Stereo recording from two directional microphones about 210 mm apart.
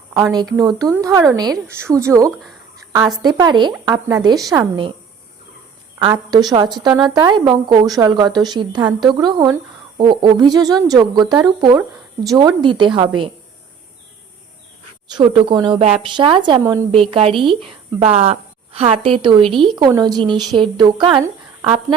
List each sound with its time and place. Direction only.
0.3 s speech: 20° right (ahead or behind)
2.3 s speech: centre (ahead or behind)
2.7 s a sound: 15° right (ahead or behind)
3.2 s speech: 20° right (ahead or behind)
6.5 s speech: 20° right (ahead or behind)
15.1 s speech: 25° right (ahead or behind)